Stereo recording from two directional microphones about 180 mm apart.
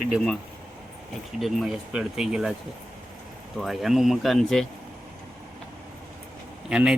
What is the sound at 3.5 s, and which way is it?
Speech, centre (ahead or behind).